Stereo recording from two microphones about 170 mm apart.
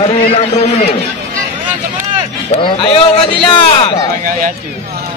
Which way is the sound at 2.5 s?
30° left (ahead or behind).